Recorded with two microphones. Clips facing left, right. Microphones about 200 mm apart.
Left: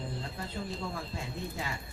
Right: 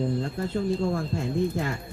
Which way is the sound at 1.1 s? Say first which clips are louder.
Right 11 dB; 50° right (ahead or behind).